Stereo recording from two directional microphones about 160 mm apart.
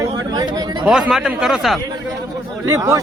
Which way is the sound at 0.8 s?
5° right (ahead or behind).